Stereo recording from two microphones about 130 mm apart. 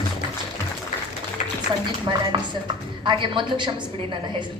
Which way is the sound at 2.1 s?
40° right (ahead or behind).